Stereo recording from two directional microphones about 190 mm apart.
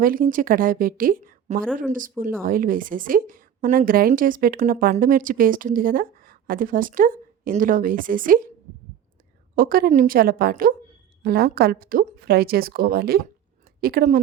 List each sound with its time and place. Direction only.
0.0 s a woman's voice: 50° right (ahead or behind)
9.6 s a woman's voice: 50° right (ahead or behind)